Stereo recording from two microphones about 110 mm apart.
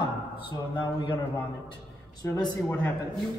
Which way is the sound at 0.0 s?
45° left (ahead or behind).